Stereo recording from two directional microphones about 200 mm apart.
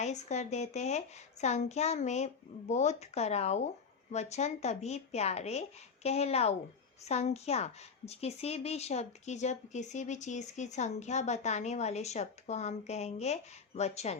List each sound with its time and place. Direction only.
0.0 s a woman's voice: 35° left (ahead or behind)